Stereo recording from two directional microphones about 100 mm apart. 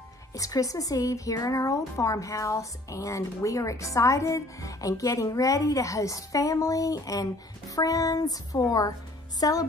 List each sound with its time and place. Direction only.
0.3 s speech: 35° left (ahead or behind)